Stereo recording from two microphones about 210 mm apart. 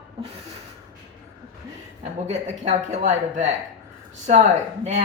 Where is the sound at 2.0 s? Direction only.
30° right (ahead or behind).